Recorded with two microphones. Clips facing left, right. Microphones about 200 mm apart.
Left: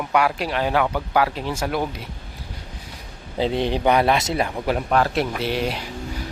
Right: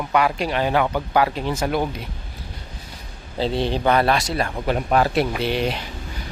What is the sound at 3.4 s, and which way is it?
A man's voice, 15° left (ahead or behind).